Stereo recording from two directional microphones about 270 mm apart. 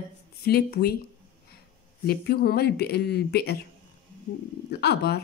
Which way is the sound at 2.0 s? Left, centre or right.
Left.